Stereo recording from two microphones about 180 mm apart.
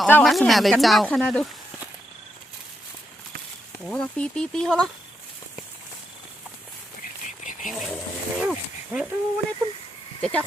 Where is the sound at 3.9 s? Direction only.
5° left (ahead or behind).